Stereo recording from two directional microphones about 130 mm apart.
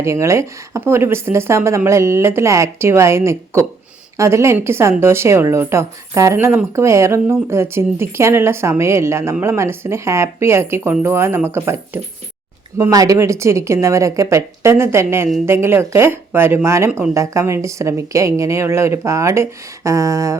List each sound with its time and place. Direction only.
0.0 s a woman's voice: 20° right (ahead or behind)